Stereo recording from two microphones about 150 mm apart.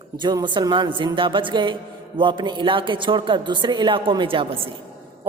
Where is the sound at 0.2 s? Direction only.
30° right (ahead or behind).